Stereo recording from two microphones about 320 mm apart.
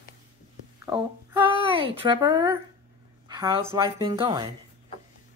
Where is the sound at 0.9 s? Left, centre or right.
Centre.